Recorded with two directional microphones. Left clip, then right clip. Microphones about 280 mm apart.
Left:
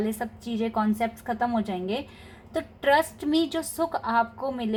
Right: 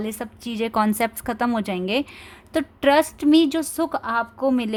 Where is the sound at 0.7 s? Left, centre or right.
Right.